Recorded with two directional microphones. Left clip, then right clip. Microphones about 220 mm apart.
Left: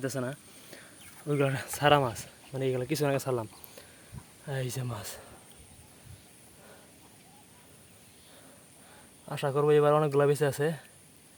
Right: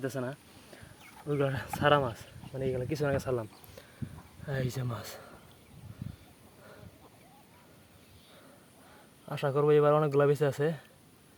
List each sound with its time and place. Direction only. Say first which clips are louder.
0.0 s speech: left 2 dB; 15° left (ahead or behind)
9.2 s speech: left 1 dB; 5° left (ahead or behind)